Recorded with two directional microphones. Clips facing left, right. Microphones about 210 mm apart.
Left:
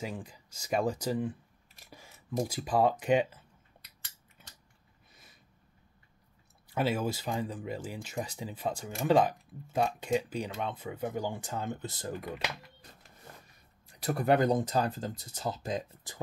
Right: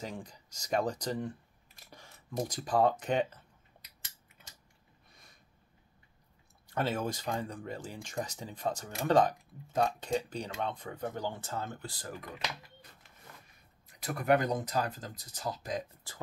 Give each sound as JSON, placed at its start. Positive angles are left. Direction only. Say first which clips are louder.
{"t": 0.0, "sound": "speech", "louder": "left 2 dB", "side_deg": 5}
{"t": 1.9, "sound": "a sound", "louder": "left 1 dB", "side_deg": 10}
{"t": 2.4, "sound": "speech", "louder": "even", "side_deg": 10}
{"t": 6.7, "sound": "speech", "louder": "left 2 dB", "side_deg": 10}
{"t": 13.8, "sound": "speech", "louder": "left 2 dB", "side_deg": 30}